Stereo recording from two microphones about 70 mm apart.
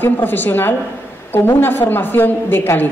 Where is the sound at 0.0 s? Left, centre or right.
Left.